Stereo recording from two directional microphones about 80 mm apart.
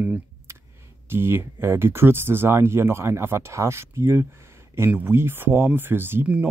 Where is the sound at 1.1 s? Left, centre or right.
Right.